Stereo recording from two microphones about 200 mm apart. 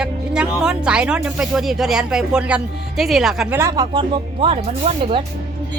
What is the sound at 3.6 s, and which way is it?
Speech, 20° right (ahead or behind).